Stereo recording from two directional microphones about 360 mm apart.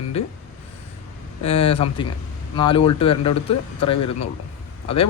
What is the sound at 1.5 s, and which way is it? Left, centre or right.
Speech, centre.